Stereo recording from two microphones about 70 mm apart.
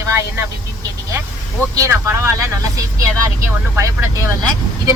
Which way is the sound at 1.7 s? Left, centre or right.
Right.